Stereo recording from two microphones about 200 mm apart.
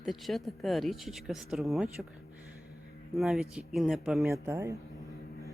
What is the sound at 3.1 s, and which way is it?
Speech, centre (ahead or behind).